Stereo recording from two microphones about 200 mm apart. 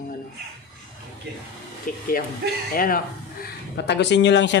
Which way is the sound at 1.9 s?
45° left (ahead or behind).